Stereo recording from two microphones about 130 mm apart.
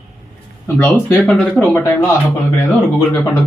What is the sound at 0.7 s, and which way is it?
Speech, 15° left (ahead or behind).